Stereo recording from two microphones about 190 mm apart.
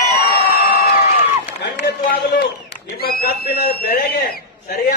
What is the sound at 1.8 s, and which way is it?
Speech, 55° left (ahead or behind).